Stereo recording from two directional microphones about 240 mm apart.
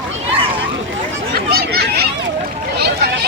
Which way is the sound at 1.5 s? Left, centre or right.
Right.